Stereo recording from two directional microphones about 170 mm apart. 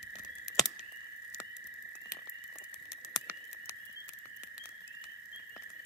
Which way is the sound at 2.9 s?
15° left (ahead or behind).